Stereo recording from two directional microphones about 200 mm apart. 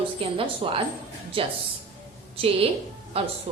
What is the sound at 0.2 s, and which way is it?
A woman's voice, 25° right (ahead or behind).